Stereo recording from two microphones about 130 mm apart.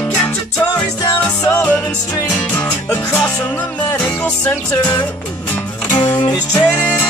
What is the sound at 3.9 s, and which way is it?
Music, 15° left (ahead or behind).